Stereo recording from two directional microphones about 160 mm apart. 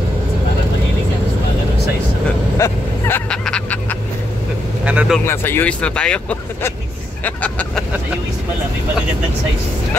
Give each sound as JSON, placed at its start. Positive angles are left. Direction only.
{"t": 2.5, "sound": "vehicle", "side_deg": 15}
{"t": 3.3, "sound": "a sound", "side_deg": 5}
{"t": 4.8, "sound": "vehicle", "side_deg": -5}
{"t": 5.2, "sound": "speech", "side_deg": 15}